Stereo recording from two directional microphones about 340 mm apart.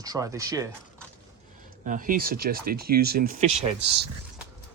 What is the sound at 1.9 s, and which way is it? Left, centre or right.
Speech, right.